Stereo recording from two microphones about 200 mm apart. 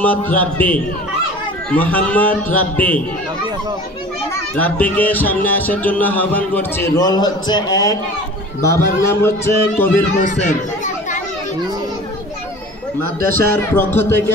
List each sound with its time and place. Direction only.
0.0 s speech: 10° left (ahead or behind)
4.6 s speech: 10° left (ahead or behind)
7.0 s a man's voice: 20° left (ahead or behind)
13.5 s speech: 10° left (ahead or behind)